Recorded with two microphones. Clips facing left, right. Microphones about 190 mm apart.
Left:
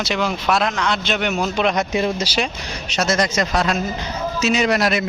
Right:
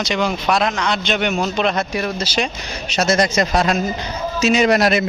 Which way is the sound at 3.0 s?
35° right (ahead or behind).